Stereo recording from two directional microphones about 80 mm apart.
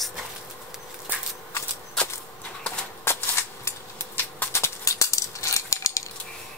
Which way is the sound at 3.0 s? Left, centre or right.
Left.